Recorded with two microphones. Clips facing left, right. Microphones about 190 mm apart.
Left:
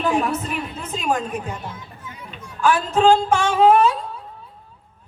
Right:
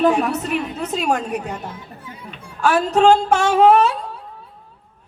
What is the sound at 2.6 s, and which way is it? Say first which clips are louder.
Speech: right 2 dB; 40° right (ahead or behind).